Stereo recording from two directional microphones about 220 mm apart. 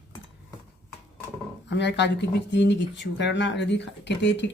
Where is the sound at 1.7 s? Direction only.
50° left (ahead or behind).